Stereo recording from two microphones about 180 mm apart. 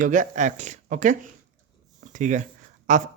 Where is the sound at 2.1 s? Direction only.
45° right (ahead or behind).